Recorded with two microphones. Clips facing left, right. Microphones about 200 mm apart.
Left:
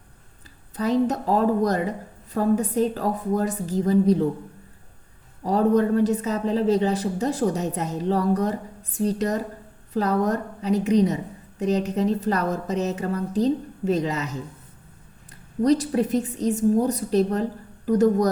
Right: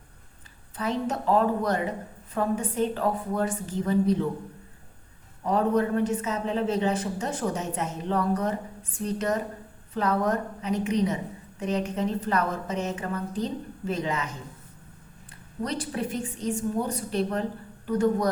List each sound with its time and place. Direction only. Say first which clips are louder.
0.8 s a woman's voice: left 7 dB; 35° left (ahead or behind)
5.5 s a woman's voice: left 4 dB; 35° left (ahead or behind)
15.6 s a woman's voice: left 10 dB; 40° left (ahead or behind)